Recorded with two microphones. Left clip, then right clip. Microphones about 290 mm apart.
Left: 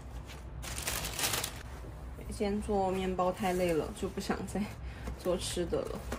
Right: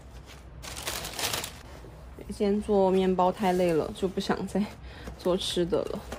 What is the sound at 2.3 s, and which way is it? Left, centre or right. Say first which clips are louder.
Speech: right 7 dB; right.